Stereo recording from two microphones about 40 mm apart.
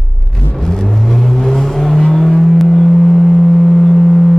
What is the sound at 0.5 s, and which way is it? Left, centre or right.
Car, centre.